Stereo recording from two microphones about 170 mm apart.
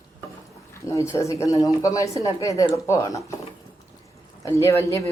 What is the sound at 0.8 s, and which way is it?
A woman's voice, 20° left (ahead or behind).